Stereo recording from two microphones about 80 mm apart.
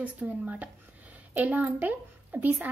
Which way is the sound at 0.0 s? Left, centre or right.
Centre.